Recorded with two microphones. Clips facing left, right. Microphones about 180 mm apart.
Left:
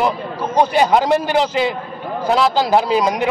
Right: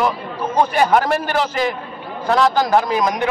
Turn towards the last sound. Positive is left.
turn(degrees=10)  # may be behind; listen again after turning